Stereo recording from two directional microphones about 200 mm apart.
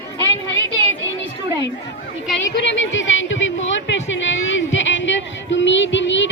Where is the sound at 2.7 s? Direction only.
70° left (ahead or behind).